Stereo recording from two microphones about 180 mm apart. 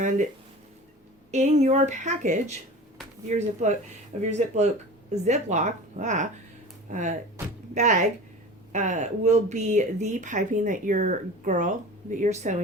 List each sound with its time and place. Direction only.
1.3 s a woman's voice: 40° right (ahead or behind)